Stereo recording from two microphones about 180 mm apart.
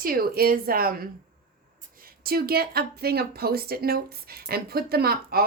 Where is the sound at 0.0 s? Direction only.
55° right (ahead or behind).